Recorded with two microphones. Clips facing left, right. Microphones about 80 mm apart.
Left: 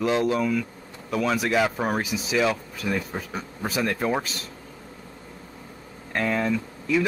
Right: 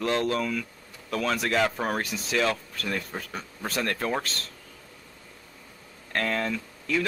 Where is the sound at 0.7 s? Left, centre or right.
Left.